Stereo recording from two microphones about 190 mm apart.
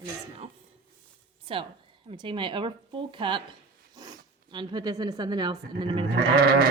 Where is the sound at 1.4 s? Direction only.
25° right (ahead or behind).